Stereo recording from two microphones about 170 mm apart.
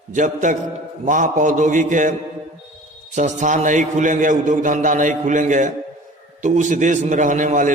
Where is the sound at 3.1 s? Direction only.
45° right (ahead or behind).